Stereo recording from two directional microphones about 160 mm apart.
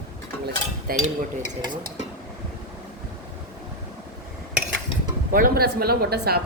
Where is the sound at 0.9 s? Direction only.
70° right (ahead or behind).